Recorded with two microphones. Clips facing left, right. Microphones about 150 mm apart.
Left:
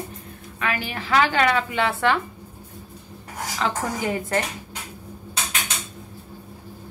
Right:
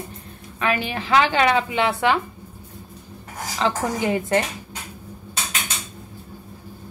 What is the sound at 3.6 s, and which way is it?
Speech, 25° right (ahead or behind).